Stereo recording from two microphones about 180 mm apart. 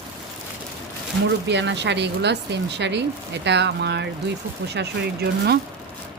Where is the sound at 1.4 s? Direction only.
75° right (ahead or behind).